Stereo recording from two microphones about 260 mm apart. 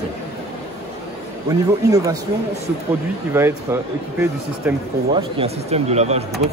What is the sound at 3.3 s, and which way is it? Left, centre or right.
Speech, centre.